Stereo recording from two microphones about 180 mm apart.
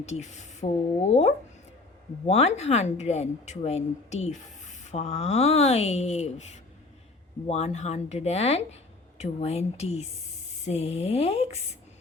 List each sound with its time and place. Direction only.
0.0 s a woman's voice: 40° left (ahead or behind)